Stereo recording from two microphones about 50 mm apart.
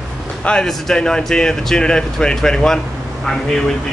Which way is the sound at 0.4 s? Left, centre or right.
Centre.